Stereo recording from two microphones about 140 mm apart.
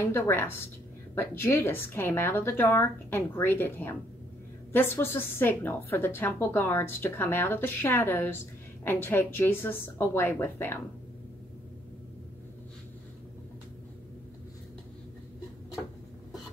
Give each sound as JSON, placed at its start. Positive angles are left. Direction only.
{"t": 0.1, "sound": "a woman's voice", "side_deg": 15}